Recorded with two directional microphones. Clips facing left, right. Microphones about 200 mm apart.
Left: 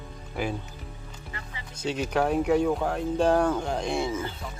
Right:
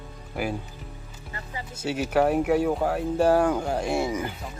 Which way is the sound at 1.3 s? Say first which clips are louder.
Right 7 dB; 35° right (ahead or behind).